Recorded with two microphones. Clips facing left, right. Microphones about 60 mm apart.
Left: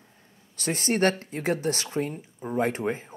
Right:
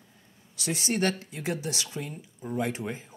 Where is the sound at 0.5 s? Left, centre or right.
Left.